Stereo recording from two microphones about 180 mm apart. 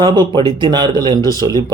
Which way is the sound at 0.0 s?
25° right (ahead or behind).